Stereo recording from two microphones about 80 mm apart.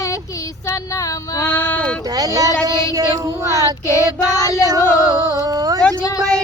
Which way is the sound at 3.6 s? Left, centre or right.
Left.